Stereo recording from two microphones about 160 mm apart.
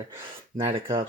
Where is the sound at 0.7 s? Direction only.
20° right (ahead or behind).